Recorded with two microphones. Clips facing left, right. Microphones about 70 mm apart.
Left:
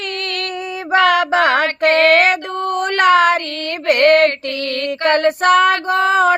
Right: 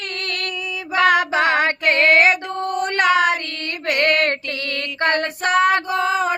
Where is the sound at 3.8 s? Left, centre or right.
Left.